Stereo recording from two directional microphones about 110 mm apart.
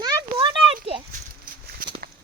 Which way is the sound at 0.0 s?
40° right (ahead or behind).